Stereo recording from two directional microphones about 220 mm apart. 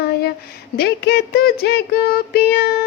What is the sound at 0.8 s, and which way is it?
Speech, 45° left (ahead or behind).